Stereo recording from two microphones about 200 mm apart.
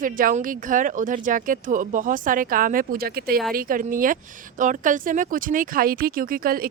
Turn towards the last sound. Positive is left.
turn(degrees=-45)  # may be behind; listen again after turning